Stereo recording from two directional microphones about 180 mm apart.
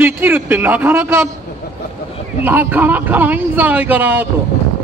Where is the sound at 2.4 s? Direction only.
10° right (ahead or behind).